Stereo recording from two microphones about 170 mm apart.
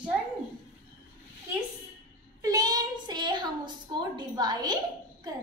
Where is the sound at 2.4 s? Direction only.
20° right (ahead or behind).